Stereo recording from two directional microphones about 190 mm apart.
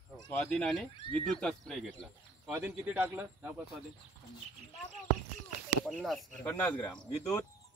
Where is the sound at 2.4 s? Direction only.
10° right (ahead or behind).